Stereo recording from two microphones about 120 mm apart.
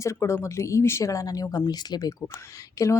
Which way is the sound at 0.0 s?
25° left (ahead or behind).